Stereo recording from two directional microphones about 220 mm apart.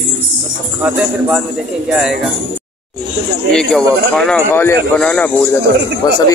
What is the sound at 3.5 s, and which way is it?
Speech, centre (ahead or behind).